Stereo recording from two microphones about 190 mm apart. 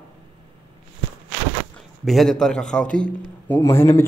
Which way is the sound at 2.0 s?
Centre (ahead or behind).